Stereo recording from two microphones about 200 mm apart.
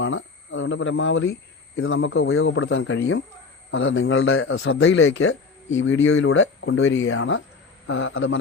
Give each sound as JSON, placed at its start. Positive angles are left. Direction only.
{"t": 0.0, "sound": "a man's voice", "side_deg": 75}